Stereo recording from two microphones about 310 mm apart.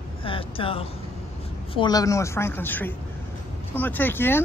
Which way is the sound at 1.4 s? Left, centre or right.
Centre.